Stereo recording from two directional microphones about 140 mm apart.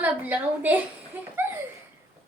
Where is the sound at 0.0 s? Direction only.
10° right (ahead or behind).